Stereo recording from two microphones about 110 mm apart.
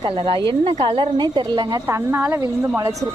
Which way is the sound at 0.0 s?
55° right (ahead or behind).